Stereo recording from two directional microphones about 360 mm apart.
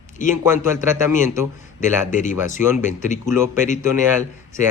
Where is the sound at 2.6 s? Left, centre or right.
Centre.